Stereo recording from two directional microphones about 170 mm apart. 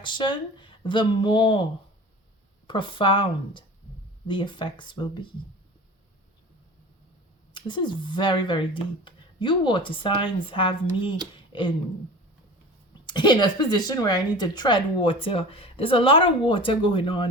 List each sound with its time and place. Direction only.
0.0 s speech: 30° left (ahead or behind)
2.6 s speech: 30° left (ahead or behind)
7.5 s speech: 30° left (ahead or behind)
13.1 s a woman's voice: 25° left (ahead or behind)